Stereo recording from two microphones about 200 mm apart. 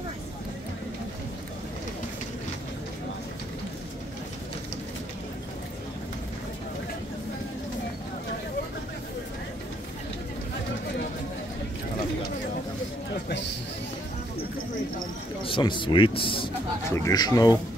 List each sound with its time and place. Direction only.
15.4 s a man's voice: 25° left (ahead or behind)